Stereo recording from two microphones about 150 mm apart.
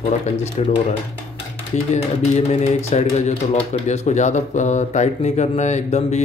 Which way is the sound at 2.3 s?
45° left (ahead or behind).